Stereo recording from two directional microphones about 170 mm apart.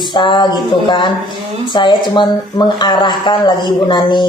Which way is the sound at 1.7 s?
25° left (ahead or behind).